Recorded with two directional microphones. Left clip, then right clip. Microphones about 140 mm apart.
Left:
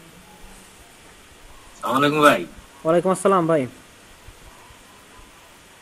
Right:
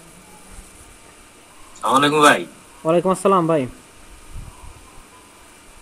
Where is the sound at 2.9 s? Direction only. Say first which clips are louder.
Right 1 dB; 10° right (ahead or behind).